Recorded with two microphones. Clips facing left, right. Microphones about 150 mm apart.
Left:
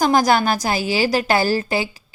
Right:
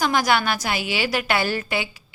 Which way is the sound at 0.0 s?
40° left (ahead or behind).